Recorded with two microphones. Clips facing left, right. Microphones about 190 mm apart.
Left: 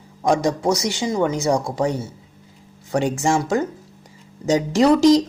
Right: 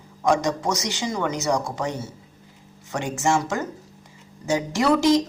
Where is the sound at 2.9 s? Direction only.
35° left (ahead or behind).